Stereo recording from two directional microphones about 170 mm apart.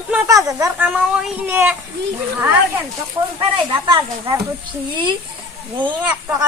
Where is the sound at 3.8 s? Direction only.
25° right (ahead or behind).